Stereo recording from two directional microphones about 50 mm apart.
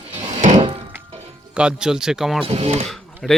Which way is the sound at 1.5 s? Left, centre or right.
Centre.